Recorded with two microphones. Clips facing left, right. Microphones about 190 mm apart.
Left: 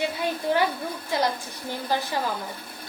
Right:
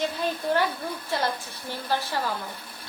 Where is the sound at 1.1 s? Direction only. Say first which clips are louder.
Left 3 dB; 15° left (ahead or behind).